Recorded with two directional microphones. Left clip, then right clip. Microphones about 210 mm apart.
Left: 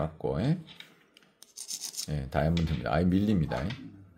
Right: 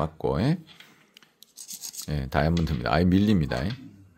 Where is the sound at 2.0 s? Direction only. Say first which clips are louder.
Right 5 dB; 30° right (ahead or behind).